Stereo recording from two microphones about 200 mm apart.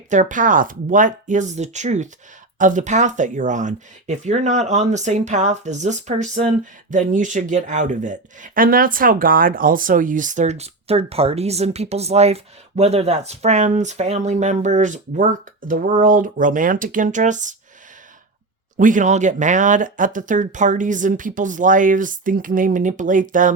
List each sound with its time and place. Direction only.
0.1 s speech: 40° right (ahead or behind)
18.8 s speech: 40° right (ahead or behind)